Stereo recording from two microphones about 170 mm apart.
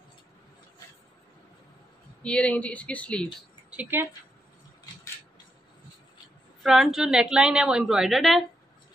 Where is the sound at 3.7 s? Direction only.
10° right (ahead or behind).